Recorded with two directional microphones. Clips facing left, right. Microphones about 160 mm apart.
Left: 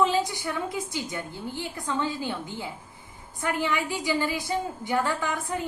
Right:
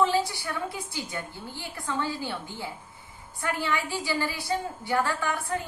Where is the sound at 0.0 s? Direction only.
20° left (ahead or behind).